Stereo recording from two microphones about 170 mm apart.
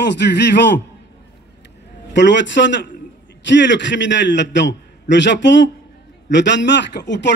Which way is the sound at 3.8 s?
90° left.